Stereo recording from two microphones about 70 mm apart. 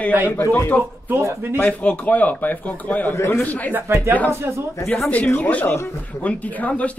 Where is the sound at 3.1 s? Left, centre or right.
Left.